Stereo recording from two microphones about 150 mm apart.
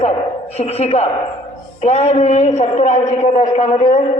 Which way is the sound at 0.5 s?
45° left (ahead or behind).